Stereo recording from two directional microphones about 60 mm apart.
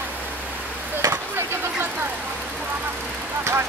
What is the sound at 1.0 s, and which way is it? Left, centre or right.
Chop, right.